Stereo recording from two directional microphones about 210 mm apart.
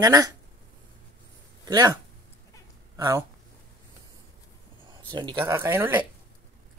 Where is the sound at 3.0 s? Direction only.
15° right (ahead or behind).